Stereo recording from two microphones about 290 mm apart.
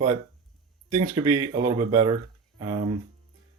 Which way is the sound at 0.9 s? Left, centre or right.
Centre.